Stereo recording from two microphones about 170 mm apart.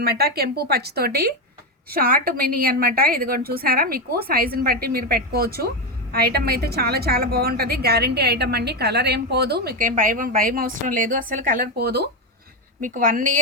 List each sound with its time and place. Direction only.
0.0 s a woman's voice: 65° right (ahead or behind)
12.8 s a woman's voice: 50° right (ahead or behind)